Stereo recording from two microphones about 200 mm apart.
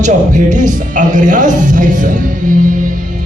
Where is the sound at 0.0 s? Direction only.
40° right (ahead or behind).